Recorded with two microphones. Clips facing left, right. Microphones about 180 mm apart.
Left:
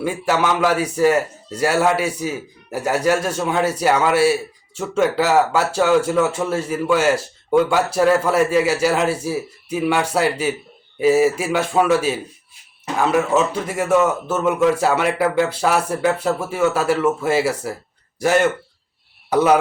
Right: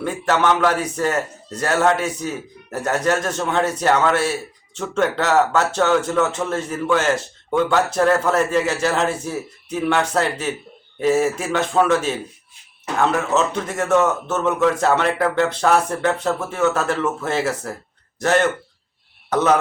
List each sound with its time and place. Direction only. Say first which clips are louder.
0.0 s a man's voice: even; 10° left (ahead or behind)